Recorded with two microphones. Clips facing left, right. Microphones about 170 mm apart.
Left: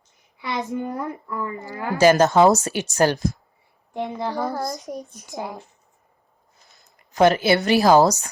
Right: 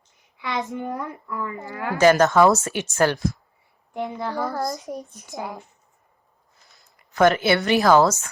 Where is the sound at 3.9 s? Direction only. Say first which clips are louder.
Left 1 dB; 25° left (ahead or behind).